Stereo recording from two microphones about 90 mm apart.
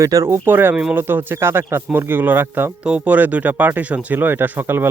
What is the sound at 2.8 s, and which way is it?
Speech, 15° right (ahead or behind).